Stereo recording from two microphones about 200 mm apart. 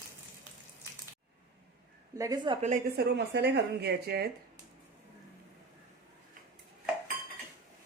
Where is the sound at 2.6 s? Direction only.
40° right (ahead or behind).